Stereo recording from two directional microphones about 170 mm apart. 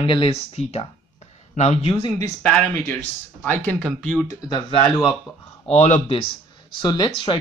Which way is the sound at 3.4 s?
10° left (ahead or behind).